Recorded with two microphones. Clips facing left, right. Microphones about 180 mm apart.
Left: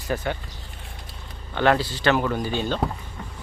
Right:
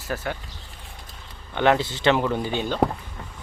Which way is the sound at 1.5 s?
15° right (ahead or behind).